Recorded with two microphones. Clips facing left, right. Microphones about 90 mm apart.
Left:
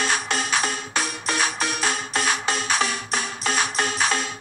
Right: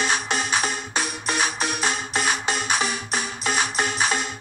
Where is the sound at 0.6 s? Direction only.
5° right (ahead or behind).